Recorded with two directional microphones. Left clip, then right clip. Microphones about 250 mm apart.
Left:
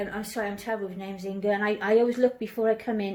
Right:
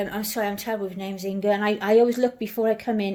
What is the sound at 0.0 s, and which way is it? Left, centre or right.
A woman's voice, right.